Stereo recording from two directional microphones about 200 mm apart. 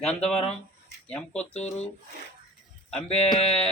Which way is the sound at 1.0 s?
5° left (ahead or behind).